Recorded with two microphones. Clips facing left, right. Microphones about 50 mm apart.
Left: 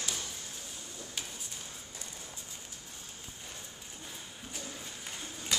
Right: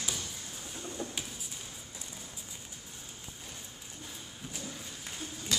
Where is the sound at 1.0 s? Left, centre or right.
Right.